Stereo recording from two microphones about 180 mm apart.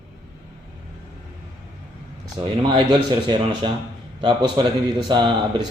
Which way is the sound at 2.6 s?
25° right (ahead or behind).